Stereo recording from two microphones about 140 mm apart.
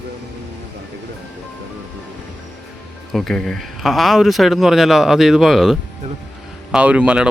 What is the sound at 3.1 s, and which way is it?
Speech, 5° left (ahead or behind).